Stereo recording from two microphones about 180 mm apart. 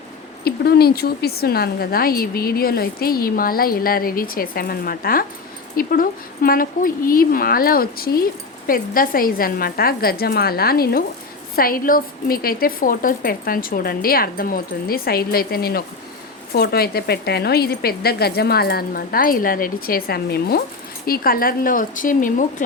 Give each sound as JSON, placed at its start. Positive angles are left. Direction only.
{"t": 0.4, "sound": "speech", "side_deg": 60}